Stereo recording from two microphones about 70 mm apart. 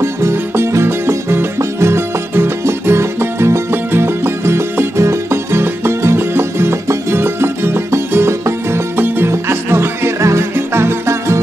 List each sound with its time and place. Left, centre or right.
0.0 s music: right
9.0 s music: right